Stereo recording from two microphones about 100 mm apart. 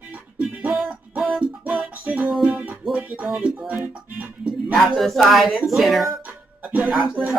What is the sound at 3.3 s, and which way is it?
Speech, 5° right (ahead or behind).